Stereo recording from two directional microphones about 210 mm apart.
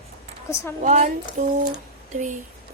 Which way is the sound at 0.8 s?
35° right (ahead or behind).